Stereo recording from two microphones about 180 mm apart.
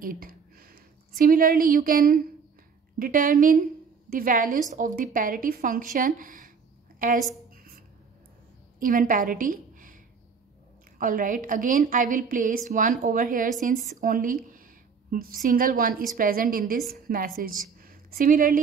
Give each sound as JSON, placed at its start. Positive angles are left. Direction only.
{"t": 0.0, "sound": "a sound", "side_deg": -55}
{"t": 1.1, "sound": "a woman's voice", "side_deg": -50}
{"t": 8.7, "sound": "a woman's voice", "side_deg": -50}
{"t": 11.0, "sound": "a woman's voice", "side_deg": -50}